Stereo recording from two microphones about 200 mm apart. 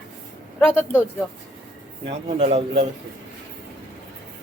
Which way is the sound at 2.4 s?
30° right (ahead or behind).